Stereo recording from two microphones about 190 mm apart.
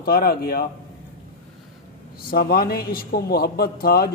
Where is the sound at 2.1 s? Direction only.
50° left (ahead or behind).